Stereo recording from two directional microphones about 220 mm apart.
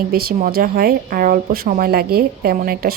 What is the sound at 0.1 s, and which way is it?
A woman's voice, 45° right (ahead or behind).